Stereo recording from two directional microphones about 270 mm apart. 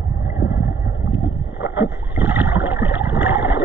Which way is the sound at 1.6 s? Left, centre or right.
Centre.